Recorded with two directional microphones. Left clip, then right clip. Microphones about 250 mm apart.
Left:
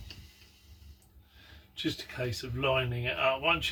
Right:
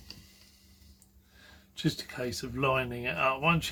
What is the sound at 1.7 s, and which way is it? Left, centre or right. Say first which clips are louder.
Speech: right 1 dB; centre.